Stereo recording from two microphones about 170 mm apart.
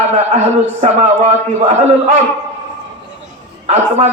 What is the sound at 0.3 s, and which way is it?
A man's voice, 40° right (ahead or behind).